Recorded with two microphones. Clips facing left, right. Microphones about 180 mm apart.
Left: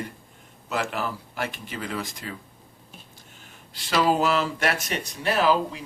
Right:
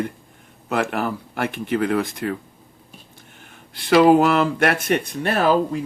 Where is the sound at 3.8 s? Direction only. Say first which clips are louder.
Right 9 dB; 55° right (ahead or behind).